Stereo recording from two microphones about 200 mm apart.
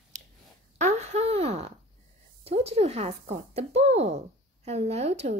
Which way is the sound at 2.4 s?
30° right (ahead or behind).